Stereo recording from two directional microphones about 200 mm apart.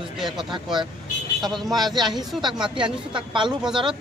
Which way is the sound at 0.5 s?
25° right (ahead or behind).